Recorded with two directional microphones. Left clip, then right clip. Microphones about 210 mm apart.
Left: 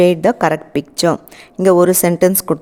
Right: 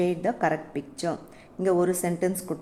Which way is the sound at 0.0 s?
50° left (ahead or behind).